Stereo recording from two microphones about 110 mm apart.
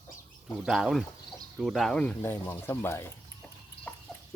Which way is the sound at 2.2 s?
20° left (ahead or behind).